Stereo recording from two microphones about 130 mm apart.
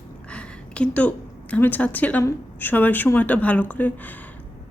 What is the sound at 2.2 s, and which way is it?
A woman's voice, 15° left (ahead or behind).